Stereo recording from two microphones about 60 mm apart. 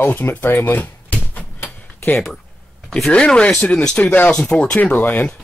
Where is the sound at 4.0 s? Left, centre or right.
Left.